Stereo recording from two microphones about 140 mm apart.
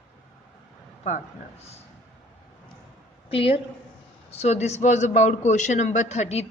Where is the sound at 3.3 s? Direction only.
40° left (ahead or behind).